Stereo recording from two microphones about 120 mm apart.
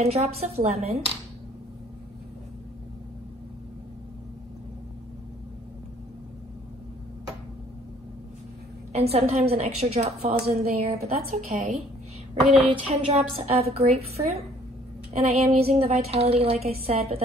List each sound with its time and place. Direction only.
0.0 s a woman's voice: 60° right (ahead or behind)
8.9 s a woman's voice: 60° right (ahead or behind)
13.0 s a woman's voice: 60° right (ahead or behind)